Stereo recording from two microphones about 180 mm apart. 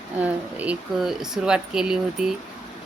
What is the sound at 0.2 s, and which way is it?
Speech, 10° right (ahead or behind).